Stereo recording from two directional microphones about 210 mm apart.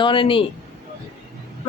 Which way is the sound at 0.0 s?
25° left (ahead or behind).